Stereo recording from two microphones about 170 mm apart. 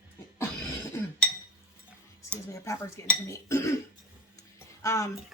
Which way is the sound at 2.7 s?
20° left (ahead or behind).